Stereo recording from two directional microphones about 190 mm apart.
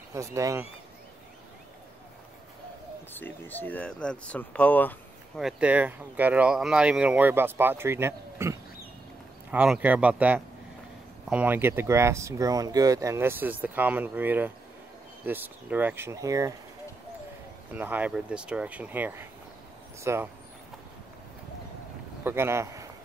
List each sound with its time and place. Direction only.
0.1 s speech: 15° right (ahead or behind)
3.1 s speech: 10° left (ahead or behind)
5.4 s speech: 5° right (ahead or behind)
17.7 s speech: 10° right (ahead or behind)
22.2 s speech: 15° right (ahead or behind)